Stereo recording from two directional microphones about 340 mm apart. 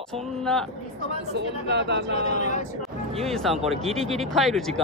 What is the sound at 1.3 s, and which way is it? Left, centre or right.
Speech, right.